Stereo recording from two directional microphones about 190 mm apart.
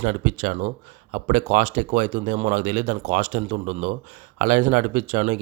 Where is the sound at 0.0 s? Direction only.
45° right (ahead or behind).